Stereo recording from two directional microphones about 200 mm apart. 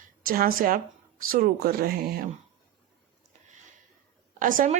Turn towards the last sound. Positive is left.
turn(degrees=-40)  # may be behind; listen again after turning